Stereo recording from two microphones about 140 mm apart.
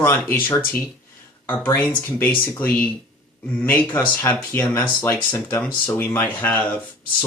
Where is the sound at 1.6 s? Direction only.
15° left (ahead or behind).